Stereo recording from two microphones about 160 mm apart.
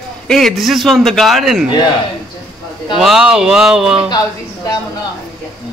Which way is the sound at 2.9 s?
Centre (ahead or behind).